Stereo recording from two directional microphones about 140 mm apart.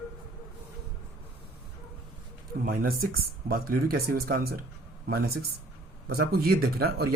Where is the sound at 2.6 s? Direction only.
90° right.